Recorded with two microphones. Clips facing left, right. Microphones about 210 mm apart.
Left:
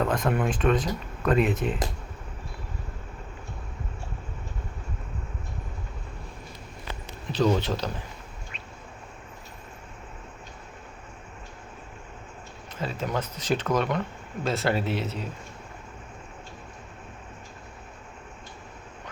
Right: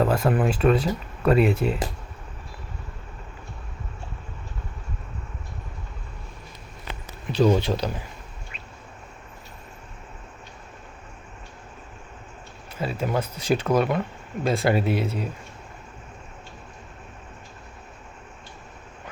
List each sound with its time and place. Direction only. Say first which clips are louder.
0.0 s speech: right 4 dB; 5° right (ahead or behind)
7.3 s speech: right 4 dB; 10° right (ahead or behind)
12.7 s speech: right 4 dB; 10° right (ahead or behind)